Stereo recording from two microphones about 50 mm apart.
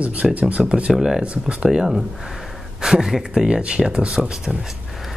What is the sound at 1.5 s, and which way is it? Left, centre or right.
Speech, centre.